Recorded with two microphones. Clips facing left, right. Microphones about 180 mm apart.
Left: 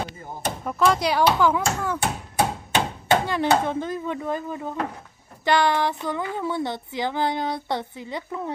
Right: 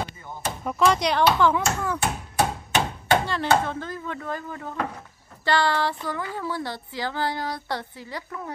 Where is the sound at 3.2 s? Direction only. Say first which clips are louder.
Left 2 dB; 15° left (ahead or behind).